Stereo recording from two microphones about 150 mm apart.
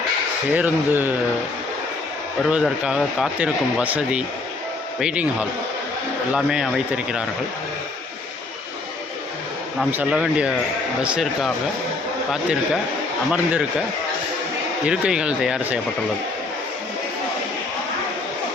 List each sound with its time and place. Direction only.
0.5 s speech: 10° right (ahead or behind)
2.5 s speech: 5° right (ahead or behind)
9.9 s speech: 10° right (ahead or behind)
12.3 s speech: centre (ahead or behind)
14.8 s speech: 5° right (ahead or behind)